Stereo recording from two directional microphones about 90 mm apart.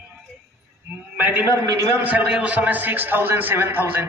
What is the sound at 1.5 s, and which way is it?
Speech, 30° right (ahead or behind).